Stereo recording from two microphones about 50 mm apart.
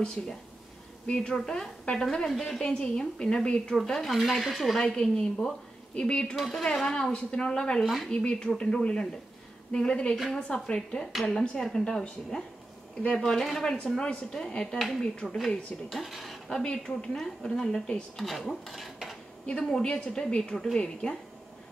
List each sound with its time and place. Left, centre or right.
1.0 s a woman's voice: centre
4.7 s a woman's voice: centre
5.9 s speech: left
6.3 s a woman's voice: centre
7.8 s speech: centre
8.1 s a woman's voice: centre
13.7 s a woman's voice: centre
15.2 s speech: centre
16.4 s a woman's voice: centre
19.7 s a woman's voice: centre